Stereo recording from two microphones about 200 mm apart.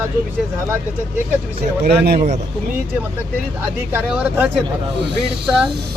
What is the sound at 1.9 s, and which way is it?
Speech, 50° right (ahead or behind).